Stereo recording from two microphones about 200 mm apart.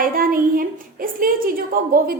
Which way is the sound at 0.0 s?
45° right (ahead or behind).